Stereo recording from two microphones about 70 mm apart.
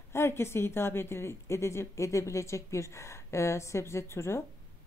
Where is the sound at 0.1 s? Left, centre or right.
Left.